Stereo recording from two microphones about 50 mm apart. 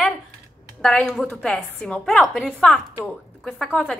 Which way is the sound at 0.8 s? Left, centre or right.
Centre.